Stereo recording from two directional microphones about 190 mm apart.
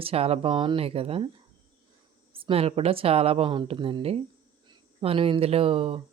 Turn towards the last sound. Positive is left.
turn(degrees=-30)  # may be behind; listen again after turning